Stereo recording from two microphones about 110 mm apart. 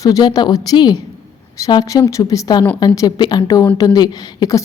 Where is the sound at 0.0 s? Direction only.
35° left (ahead or behind).